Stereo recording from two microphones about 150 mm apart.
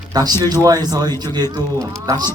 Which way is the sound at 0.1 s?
25° right (ahead or behind).